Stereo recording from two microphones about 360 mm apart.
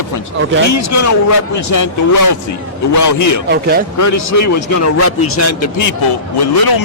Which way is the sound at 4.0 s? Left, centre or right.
Left.